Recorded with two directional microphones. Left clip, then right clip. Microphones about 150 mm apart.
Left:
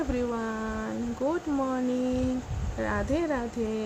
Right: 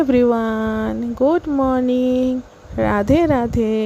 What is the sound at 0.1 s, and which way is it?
A woman's voice, 60° right (ahead or behind).